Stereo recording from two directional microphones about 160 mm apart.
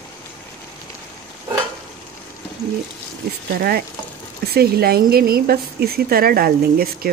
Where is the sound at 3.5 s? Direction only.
70° right (ahead or behind).